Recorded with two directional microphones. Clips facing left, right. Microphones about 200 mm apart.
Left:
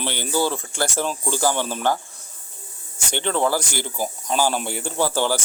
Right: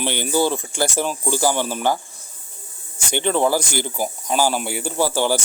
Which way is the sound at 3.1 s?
15° right (ahead or behind).